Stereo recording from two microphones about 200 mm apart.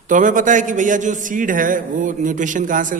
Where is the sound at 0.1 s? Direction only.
40° right (ahead or behind).